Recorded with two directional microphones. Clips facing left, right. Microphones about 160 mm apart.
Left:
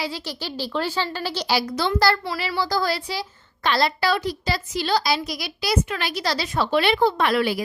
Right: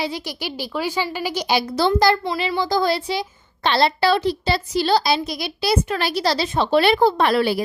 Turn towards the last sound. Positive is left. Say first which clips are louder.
# right 3 dB
turn(degrees=-30)  # may be behind; listen again after turning